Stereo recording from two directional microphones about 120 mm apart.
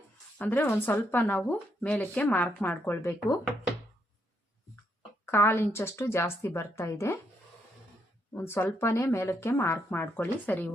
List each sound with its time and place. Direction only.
0.3 s speech: 15° left (ahead or behind)
5.3 s speech: 20° left (ahead or behind)
8.3 s speech: 20° left (ahead or behind)